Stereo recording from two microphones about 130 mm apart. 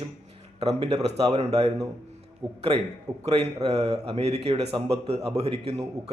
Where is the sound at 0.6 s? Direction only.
55° right (ahead or behind).